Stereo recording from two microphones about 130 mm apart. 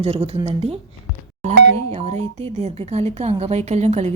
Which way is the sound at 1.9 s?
55° right (ahead or behind).